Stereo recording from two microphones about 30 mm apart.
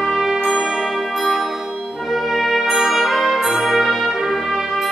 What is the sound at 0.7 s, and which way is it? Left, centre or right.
Music, centre.